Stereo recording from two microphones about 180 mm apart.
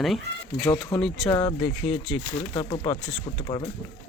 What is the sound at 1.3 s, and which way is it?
Speech, 25° left (ahead or behind).